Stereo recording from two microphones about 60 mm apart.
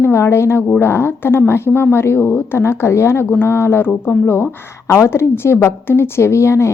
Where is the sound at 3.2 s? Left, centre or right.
Left.